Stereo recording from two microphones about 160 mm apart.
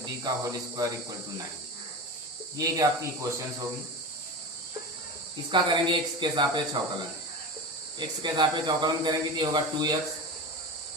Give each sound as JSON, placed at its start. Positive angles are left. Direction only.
{"t": 0.0, "sound": "speech", "side_deg": -25}
{"t": 2.6, "sound": "speech", "side_deg": -20}
{"t": 5.5, "sound": "speech", "side_deg": -30}
{"t": 7.9, "sound": "speech", "side_deg": -30}